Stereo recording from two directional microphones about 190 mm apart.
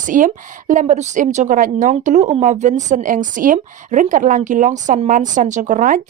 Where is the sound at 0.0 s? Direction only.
45° right (ahead or behind).